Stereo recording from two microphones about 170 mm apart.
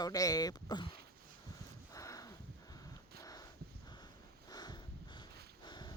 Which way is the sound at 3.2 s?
20° left (ahead or behind).